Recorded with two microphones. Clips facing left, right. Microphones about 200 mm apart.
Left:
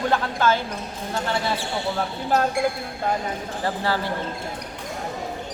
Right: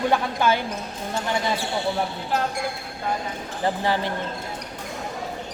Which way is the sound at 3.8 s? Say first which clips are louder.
Even; 20° right (ahead or behind).